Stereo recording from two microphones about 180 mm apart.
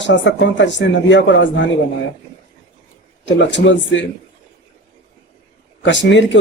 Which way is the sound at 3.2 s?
80° left.